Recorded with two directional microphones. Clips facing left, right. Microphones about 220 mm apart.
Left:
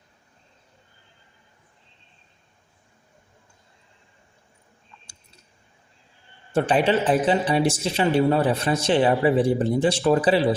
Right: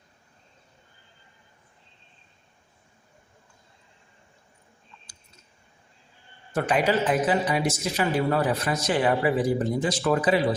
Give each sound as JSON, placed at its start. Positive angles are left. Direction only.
{"t": 6.5, "sound": "speech", "side_deg": 30}